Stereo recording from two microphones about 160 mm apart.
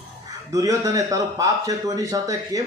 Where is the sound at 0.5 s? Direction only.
20° right (ahead or behind).